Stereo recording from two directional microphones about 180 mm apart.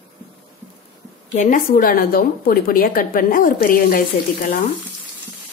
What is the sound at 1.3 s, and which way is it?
A woman's voice, 50° left (ahead or behind).